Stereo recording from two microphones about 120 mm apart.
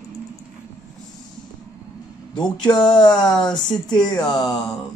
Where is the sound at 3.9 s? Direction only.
35° left (ahead or behind).